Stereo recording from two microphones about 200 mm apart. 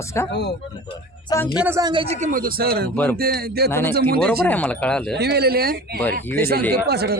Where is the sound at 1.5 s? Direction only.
10° right (ahead or behind); by 4.2 s 50° right (ahead or behind).